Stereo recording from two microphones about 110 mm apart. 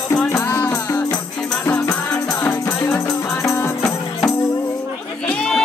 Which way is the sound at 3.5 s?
20° left (ahead or behind).